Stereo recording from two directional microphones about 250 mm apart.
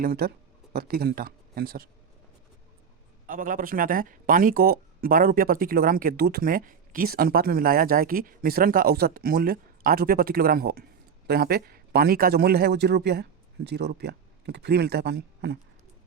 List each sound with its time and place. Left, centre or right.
0.0 s speech: right
3.2 s speech: right